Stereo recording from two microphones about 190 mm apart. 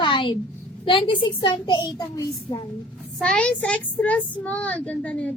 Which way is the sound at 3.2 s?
5° left (ahead or behind).